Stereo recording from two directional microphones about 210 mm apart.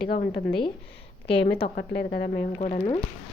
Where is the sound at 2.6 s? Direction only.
30° left (ahead or behind).